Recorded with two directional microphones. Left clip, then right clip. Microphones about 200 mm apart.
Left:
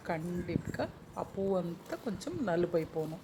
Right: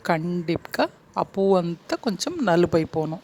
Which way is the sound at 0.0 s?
55° right (ahead or behind).